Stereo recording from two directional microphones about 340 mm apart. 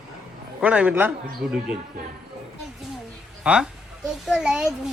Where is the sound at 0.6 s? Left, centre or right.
Centre.